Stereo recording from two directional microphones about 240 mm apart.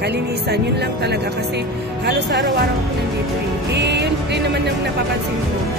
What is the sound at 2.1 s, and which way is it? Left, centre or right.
Speech, right.